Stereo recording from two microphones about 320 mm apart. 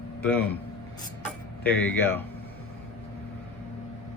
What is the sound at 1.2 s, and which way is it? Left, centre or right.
Tick-tock, centre.